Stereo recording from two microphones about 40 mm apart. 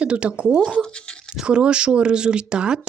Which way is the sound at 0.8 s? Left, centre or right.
Left.